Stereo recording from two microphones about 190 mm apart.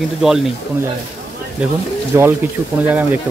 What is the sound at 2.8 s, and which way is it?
Speech, 10° right (ahead or behind).